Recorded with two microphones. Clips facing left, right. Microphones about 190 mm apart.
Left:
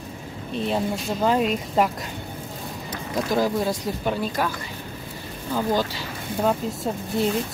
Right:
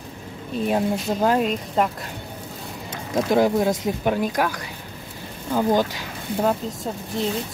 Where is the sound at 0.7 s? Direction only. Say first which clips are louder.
Right 3 dB; 5° right (ahead or behind).